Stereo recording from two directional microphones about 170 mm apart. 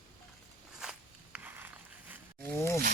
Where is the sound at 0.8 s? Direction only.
5° right (ahead or behind).